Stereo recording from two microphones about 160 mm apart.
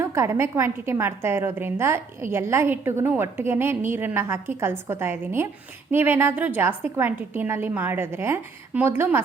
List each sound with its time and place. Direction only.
0.0 s a woman's voice: 20° right (ahead or behind)